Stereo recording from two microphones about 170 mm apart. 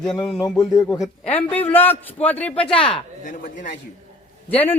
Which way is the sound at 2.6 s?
30° left (ahead or behind).